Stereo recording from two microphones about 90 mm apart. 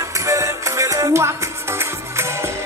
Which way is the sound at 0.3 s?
35° right (ahead or behind).